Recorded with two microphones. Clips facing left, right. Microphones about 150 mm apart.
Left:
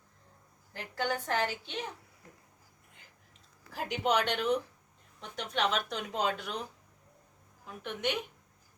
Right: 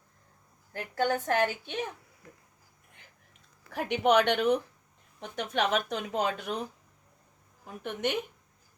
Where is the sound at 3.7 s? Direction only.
60° right (ahead or behind).